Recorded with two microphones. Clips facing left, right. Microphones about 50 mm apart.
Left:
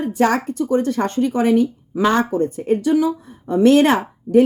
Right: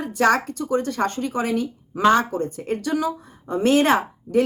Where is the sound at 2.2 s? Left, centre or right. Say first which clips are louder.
Left 4 dB; left.